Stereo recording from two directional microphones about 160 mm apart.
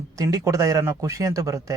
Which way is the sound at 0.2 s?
20° right (ahead or behind).